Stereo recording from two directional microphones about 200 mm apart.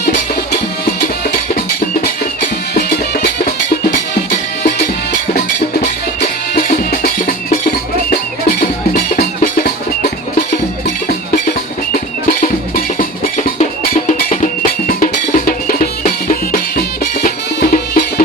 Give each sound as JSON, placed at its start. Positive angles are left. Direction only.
{"t": 6.5, "sound": "music", "side_deg": 45}
{"t": 12.4, "sound": "music", "side_deg": 45}
{"t": 14.1, "sound": "music", "side_deg": 40}